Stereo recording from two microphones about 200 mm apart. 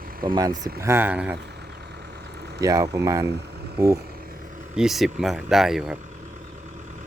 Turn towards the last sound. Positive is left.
turn(degrees=-5)  # may be behind; listen again after turning